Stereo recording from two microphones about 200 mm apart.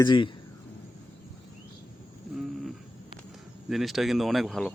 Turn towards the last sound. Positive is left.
turn(degrees=0)  # may be behind; listen again after turning